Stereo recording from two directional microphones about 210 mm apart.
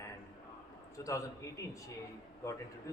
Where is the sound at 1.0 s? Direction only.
15° left (ahead or behind).